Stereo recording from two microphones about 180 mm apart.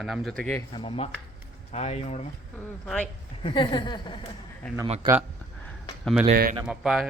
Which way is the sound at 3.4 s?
25° left (ahead or behind).